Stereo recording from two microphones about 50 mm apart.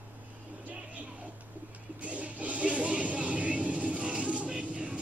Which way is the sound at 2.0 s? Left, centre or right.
Right.